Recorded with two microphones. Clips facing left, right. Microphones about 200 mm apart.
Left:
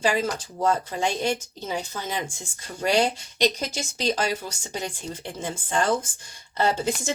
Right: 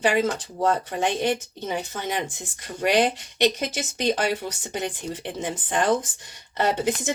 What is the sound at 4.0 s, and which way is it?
Speech, 60° right (ahead or behind).